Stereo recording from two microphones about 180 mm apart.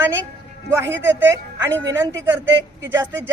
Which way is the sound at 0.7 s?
15° right (ahead or behind).